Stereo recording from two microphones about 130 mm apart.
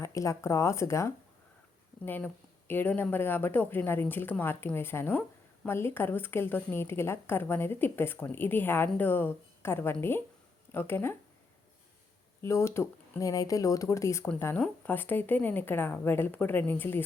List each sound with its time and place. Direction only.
0.0 s a woman's voice: 25° left (ahead or behind)
12.4 s a woman's voice: 20° left (ahead or behind)